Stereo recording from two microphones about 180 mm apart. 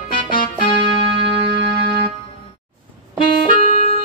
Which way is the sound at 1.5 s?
30° left (ahead or behind).